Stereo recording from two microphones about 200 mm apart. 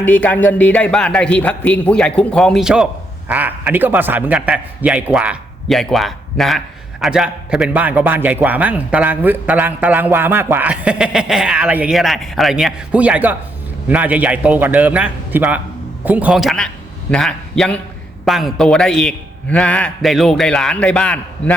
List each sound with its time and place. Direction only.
0.0 s a man's voice: 5° left (ahead or behind)